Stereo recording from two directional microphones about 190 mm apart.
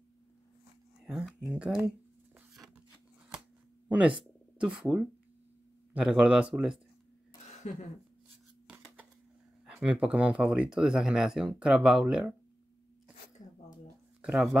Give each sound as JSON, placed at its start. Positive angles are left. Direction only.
{"t": 1.0, "sound": "speech", "side_deg": 0}
{"t": 4.6, "sound": "speech", "side_deg": -5}
{"t": 7.6, "sound": "speech", "side_deg": 35}
{"t": 8.6, "sound": "scissors", "side_deg": -5}
{"t": 9.7, "sound": "speech", "side_deg": -5}
{"t": 14.2, "sound": "speech", "side_deg": 0}